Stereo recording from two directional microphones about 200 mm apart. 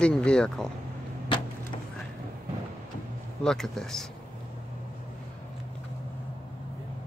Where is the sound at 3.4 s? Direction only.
5° left (ahead or behind).